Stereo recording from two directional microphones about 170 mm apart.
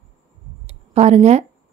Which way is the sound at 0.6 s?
40° right (ahead or behind).